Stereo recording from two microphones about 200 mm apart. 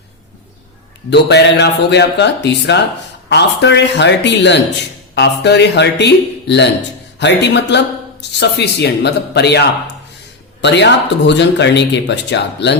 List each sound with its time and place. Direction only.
1.1 s speech: 60° left (ahead or behind)